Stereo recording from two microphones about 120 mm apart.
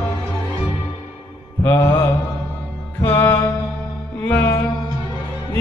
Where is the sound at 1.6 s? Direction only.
20° left (ahead or behind).